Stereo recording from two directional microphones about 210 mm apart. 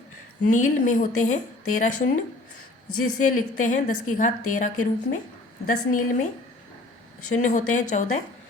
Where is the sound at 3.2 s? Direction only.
35° left (ahead or behind).